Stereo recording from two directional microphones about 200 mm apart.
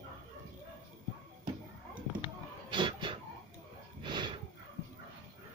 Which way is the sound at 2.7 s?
25° right (ahead or behind).